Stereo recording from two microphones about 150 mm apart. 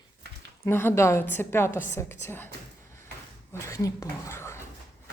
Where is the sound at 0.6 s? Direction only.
15° left (ahead or behind).